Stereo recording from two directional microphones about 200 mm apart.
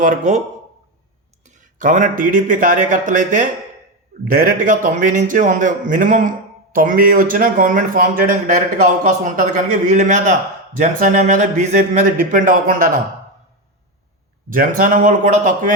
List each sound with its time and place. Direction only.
0.0 s speech: 40° right (ahead or behind)
1.5 s speech: 40° right (ahead or behind)
14.5 s a man's voice: 45° right (ahead or behind)